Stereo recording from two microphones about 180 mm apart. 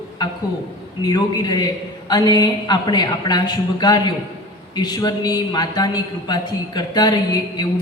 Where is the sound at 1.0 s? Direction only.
20° left (ahead or behind).